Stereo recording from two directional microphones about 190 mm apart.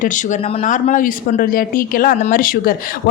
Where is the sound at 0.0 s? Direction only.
40° left (ahead or behind).